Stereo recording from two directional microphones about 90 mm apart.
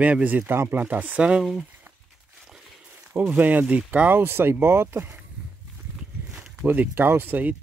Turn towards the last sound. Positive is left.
turn(degrees=-20)  # may be behind; listen again after turning